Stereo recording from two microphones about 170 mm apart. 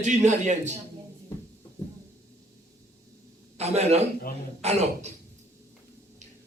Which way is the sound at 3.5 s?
40° right (ahead or behind).